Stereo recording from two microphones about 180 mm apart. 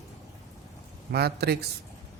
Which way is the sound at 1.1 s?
65° right (ahead or behind).